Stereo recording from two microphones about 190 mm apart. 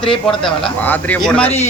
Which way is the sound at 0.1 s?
Centre (ahead or behind).